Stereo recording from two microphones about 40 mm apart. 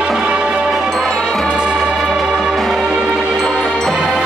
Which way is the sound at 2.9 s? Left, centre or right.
Centre.